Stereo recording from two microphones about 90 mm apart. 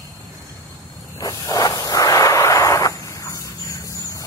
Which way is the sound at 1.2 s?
45° left (ahead or behind).